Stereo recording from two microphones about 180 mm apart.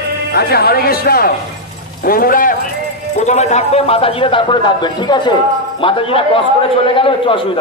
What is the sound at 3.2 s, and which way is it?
A man's voice, 40° left (ahead or behind).